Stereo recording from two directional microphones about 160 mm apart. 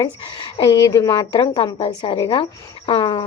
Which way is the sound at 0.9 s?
20° left (ahead or behind).